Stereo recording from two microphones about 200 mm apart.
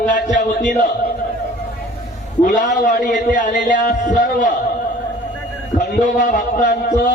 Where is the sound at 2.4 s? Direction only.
40° left (ahead or behind).